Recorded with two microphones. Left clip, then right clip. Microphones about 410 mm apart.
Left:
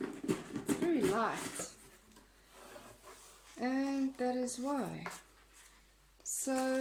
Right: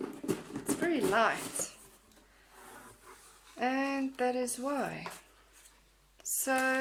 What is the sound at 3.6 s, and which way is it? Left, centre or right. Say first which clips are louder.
A woman's voice: right 4 dB; right.